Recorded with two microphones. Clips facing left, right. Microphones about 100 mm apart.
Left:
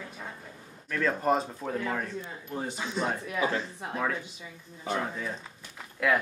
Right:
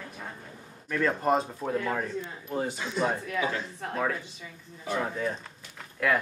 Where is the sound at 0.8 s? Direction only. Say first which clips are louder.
Right 1 dB; 5° right (ahead or behind).